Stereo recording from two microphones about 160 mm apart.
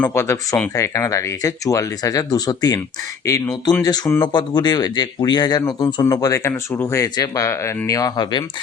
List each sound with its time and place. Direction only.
0.0 s speech: 15° left (ahead or behind)